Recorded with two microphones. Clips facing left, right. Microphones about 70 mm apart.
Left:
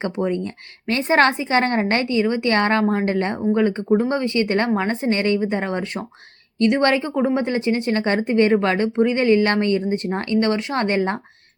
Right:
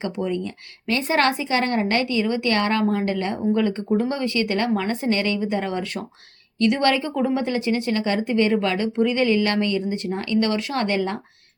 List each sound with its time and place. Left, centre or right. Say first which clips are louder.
0.0 s a woman's voice: left 3 dB; left